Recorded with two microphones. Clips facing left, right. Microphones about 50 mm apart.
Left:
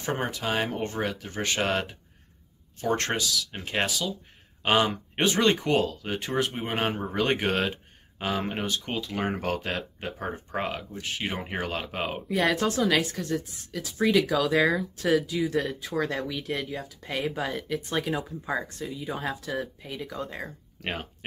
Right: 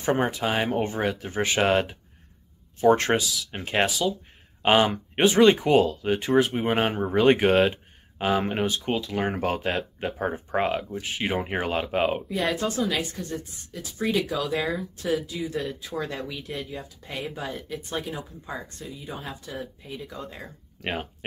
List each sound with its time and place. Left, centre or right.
0.2 s speech: centre
5.1 s speech: centre
8.6 s speech: centre
9.4 s speech: centre
12.4 s a woman's voice: left
15.3 s a woman's voice: left
20.1 s speech: left
20.4 s speech: centre